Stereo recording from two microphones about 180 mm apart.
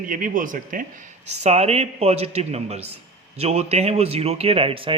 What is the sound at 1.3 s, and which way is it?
Speech, 35° right (ahead or behind).